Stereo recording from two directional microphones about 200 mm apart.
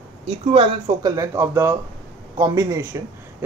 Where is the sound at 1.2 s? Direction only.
15° right (ahead or behind).